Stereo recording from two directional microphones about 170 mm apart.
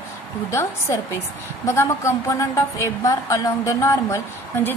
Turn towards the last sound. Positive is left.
turn(degrees=15)  # may be behind; listen again after turning